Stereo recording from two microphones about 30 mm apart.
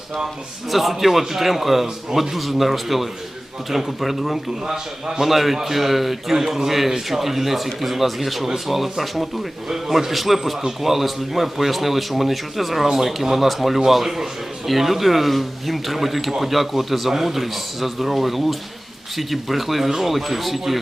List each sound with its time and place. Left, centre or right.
0.7 s a man's voice: centre